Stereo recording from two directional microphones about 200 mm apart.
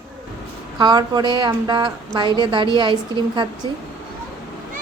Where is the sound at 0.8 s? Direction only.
20° right (ahead or behind).